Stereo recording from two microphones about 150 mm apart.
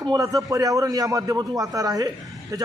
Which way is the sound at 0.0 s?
25° right (ahead or behind).